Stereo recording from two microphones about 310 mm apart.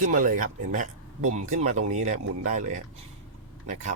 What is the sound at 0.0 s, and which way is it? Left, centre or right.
Speech, right.